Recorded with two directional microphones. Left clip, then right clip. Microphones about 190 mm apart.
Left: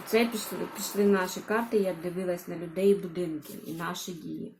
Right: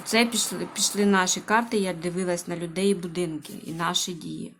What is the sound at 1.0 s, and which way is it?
A woman's voice, 35° right (ahead or behind).